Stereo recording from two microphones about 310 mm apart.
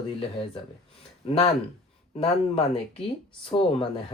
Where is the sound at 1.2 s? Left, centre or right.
Centre.